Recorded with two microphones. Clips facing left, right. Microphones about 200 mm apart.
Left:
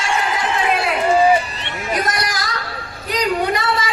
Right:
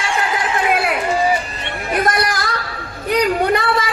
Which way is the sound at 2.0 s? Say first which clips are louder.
Right 7 dB; 55° right (ahead or behind).